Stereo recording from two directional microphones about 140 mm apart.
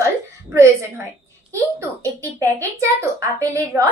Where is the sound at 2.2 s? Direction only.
20° right (ahead or behind).